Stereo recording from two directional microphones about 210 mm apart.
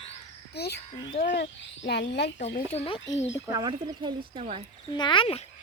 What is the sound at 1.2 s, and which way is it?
Speech, 40° left (ahead or behind).